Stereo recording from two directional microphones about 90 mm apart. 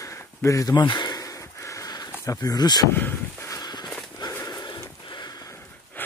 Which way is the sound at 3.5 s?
50° left (ahead or behind).